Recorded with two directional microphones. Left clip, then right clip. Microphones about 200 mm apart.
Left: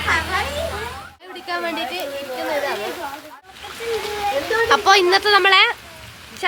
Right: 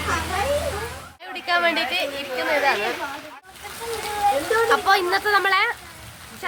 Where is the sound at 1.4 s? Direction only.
35° right (ahead or behind).